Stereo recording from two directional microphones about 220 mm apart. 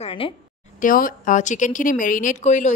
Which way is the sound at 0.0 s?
25° left (ahead or behind).